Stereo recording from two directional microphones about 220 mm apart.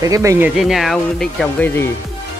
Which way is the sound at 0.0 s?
15° right (ahead or behind).